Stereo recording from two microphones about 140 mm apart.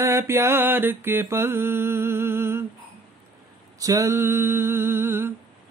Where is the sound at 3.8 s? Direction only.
25° right (ahead or behind).